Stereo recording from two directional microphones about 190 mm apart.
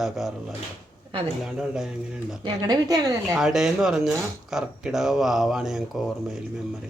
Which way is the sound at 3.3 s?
Centre (ahead or behind).